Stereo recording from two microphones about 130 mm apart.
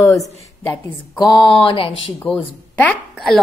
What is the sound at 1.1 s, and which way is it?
Speech, 35° left (ahead or behind).